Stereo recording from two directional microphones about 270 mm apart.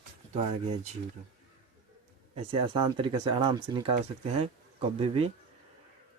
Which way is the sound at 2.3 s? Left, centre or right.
Centre.